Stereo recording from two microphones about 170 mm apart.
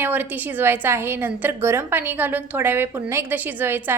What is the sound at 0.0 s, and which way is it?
A woman's voice, 10° right (ahead or behind).